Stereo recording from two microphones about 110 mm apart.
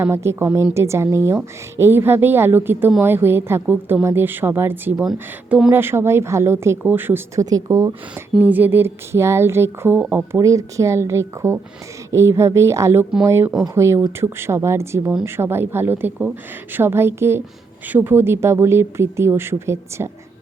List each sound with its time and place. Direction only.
0.0 s a woman's voice: 25° right (ahead or behind)
5.7 s speech: 20° right (ahead or behind)
7.5 s speech: 35° right (ahead or behind)
8.1 s speech: 15° right (ahead or behind)
10.3 s speech: 30° right (ahead or behind)